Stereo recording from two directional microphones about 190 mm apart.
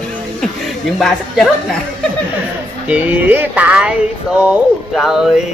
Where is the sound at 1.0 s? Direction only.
Centre (ahead or behind).